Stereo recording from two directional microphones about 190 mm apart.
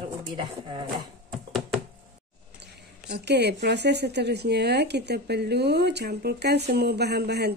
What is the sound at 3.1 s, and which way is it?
Speech, 60° right (ahead or behind).